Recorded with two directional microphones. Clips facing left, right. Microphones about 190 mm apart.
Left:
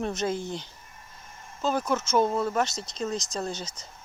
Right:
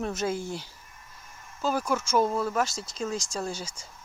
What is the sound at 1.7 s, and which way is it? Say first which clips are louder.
Speech: left 1 dB; 10° right (ahead or behind).